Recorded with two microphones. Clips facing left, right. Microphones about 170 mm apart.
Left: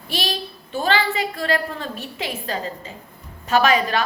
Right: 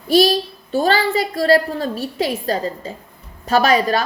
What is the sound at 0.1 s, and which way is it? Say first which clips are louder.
A woman's voice: right 13 dB; 40° right (ahead or behind).